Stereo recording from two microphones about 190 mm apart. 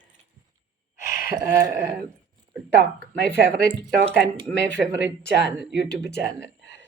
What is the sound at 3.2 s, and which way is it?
Speech, 60° left (ahead or behind).